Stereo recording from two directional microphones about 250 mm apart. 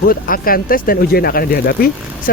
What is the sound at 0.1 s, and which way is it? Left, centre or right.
Speech, left.